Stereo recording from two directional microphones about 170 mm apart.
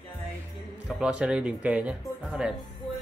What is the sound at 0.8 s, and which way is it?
Speech, 5° right (ahead or behind).